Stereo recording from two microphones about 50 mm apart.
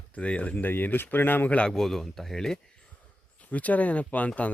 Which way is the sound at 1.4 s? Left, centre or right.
Left.